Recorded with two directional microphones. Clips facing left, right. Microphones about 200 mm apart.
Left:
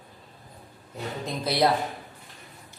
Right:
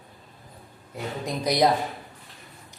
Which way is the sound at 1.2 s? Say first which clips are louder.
Right 2 dB; 15° right (ahead or behind).